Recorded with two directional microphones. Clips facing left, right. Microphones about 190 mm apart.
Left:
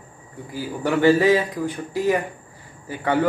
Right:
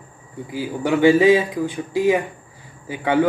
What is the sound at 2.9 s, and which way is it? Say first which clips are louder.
Speech: right 2 dB; 10° right (ahead or behind).